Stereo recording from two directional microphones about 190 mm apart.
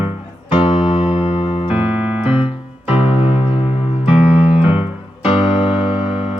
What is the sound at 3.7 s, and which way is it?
Electric piano, 5° right (ahead or behind).